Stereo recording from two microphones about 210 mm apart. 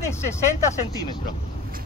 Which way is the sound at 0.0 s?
10° left (ahead or behind).